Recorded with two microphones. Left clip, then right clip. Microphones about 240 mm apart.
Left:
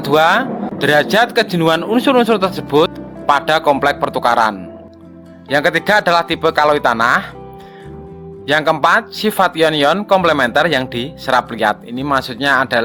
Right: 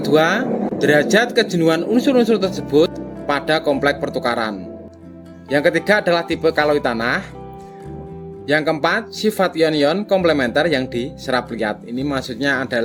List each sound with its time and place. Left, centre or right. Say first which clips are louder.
0.0 s a man's voice: left 4 dB; centre
8.4 s speech: left 5 dB; centre